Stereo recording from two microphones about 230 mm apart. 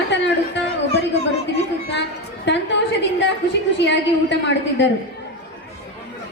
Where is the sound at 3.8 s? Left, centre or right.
Left.